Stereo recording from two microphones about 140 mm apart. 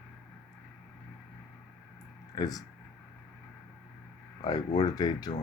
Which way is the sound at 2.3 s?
25° left (ahead or behind).